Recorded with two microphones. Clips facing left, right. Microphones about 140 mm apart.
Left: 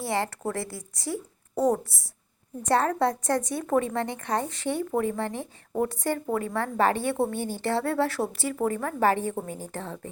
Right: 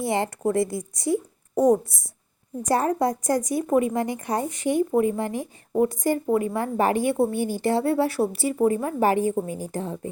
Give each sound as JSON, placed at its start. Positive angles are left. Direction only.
{"t": 0.0, "sound": "a woman's voice", "side_deg": -20}